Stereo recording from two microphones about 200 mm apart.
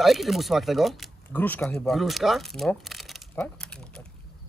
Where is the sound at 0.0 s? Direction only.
Centre (ahead or behind).